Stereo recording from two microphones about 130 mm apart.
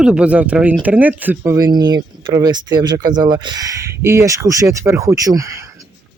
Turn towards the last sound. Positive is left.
turn(degrees=-25)  # may be behind; listen again after turning